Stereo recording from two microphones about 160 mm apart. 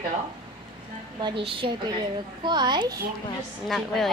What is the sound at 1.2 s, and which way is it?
A woman's voice, 30° right (ahead or behind).